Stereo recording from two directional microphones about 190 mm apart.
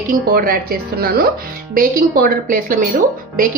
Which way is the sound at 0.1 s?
50° right (ahead or behind).